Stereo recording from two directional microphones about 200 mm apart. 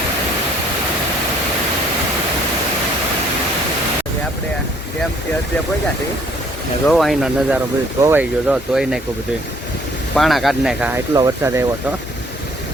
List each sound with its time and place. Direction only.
6.8 s speech: centre (ahead or behind)
10.2 s speech: centre (ahead or behind); by 11.6 s 15° right (ahead or behind)